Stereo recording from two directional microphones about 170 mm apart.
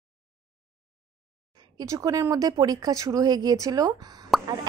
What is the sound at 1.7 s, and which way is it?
A woman's voice, 20° right (ahead or behind).